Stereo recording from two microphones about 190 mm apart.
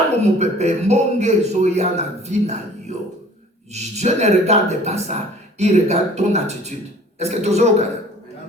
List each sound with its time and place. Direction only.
0.2 s a man's voice: 35° right (ahead or behind)